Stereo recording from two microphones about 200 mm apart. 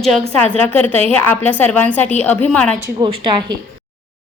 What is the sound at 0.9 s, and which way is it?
A woman's voice, 10° left (ahead or behind).